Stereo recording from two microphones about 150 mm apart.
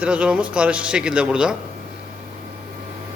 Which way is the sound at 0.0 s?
5° right (ahead or behind).